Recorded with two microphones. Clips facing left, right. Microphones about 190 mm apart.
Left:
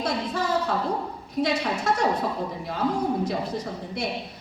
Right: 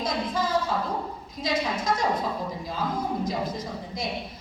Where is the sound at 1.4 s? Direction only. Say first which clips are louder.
Left 3 dB; 70° left (ahead or behind).